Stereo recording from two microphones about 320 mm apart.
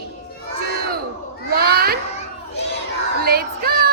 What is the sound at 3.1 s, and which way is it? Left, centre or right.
Child singing, right.